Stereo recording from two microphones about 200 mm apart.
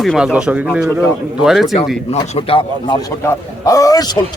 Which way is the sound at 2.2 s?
30° left (ahead or behind).